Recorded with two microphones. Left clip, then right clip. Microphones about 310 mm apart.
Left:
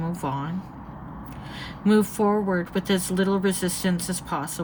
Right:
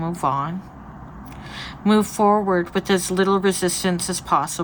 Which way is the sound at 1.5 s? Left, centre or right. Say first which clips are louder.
Right 2 dB; centre.